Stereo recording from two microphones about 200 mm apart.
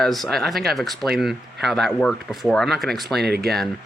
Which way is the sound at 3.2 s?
55° right (ahead or behind).